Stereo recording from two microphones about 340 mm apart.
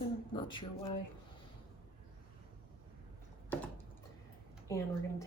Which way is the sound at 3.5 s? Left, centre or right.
Centre.